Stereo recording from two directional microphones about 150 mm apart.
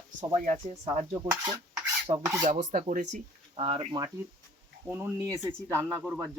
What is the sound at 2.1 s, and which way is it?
Speech, 25° right (ahead or behind).